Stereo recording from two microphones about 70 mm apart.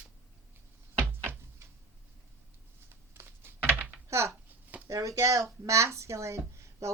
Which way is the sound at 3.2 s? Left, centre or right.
Right.